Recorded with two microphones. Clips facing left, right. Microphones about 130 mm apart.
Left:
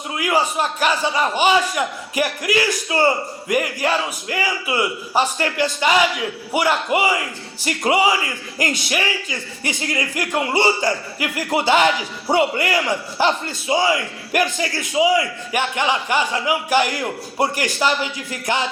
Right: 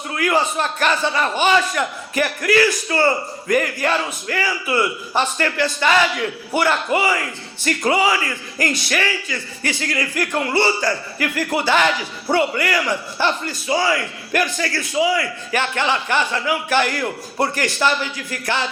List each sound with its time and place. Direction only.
0.1 s a man's voice: 10° left (ahead or behind)